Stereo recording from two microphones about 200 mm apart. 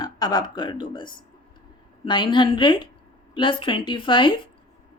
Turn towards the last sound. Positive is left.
turn(degrees=25)  # may be behind; listen again after turning